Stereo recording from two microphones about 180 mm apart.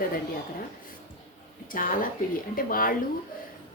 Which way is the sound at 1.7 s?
50° left (ahead or behind).